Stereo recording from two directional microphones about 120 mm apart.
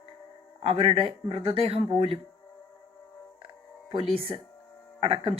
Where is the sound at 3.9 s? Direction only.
50° right (ahead or behind).